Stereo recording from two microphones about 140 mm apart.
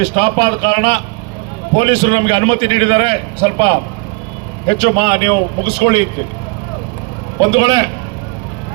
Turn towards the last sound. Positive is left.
turn(degrees=-30)  # may be behind; listen again after turning